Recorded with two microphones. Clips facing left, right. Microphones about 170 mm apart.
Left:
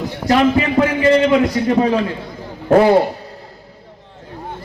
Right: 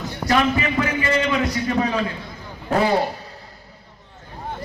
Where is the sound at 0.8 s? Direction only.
90° left.